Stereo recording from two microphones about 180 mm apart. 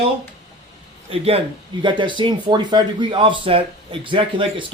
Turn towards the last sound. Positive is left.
turn(degrees=-25)  # may be behind; listen again after turning